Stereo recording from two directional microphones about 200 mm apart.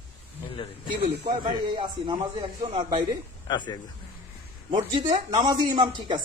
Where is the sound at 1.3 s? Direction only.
25° right (ahead or behind).